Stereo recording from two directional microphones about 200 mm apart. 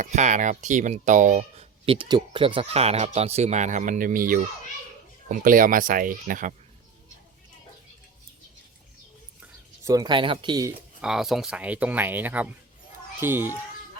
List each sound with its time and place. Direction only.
0.0 s speech: 35° right (ahead or behind)
9.8 s speech: 20° right (ahead or behind)
11.0 s a child's voice: centre (ahead or behind)